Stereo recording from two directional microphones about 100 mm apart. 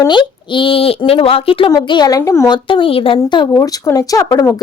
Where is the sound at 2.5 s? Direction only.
55° left (ahead or behind).